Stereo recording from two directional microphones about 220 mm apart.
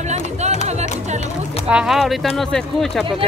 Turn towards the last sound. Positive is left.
turn(degrees=0)  # may be behind; listen again after turning